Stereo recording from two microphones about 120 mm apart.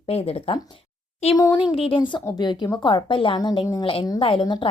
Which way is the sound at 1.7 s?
50° left (ahead or behind).